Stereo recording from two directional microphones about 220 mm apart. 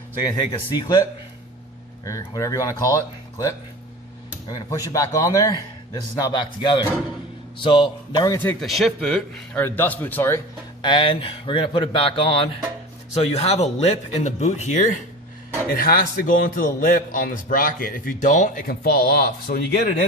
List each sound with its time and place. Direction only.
0.7 s a man's voice: 20° left (ahead or behind)
2.0 s a man's voice: 15° left (ahead or behind)
8.6 s a man's voice: centre (ahead or behind)
10.8 s a man's voice: 20° left (ahead or behind); by 19.8 s 45° left (ahead or behind)